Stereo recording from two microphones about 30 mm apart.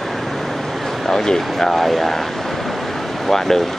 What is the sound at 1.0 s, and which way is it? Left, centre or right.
Speech, centre.